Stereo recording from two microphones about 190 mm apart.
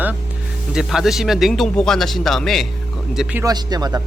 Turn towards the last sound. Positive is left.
turn(degrees=-20)  # may be behind; listen again after turning